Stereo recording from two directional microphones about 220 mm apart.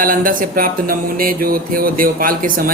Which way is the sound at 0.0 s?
40° right (ahead or behind).